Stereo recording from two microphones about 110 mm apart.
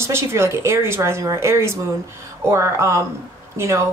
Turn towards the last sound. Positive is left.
turn(degrees=-25)  # may be behind; listen again after turning